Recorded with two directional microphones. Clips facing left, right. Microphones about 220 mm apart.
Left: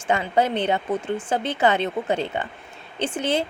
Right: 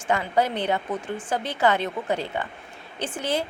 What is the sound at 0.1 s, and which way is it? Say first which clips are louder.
A woman's voice: left 2 dB; 20° left (ahead or behind).